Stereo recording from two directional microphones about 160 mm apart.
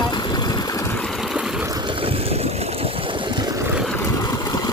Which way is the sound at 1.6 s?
25° right (ahead or behind).